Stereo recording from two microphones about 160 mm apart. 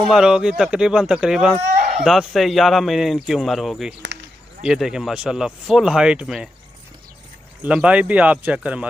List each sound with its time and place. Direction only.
0.0 s speech: 5° right (ahead or behind)
4.0 s a sound: 90° right
4.6 s speech: 5° right (ahead or behind)
7.6 s speech: 5° right (ahead or behind)